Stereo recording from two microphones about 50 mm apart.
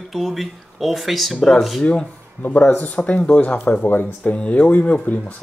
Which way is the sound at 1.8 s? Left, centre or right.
Left.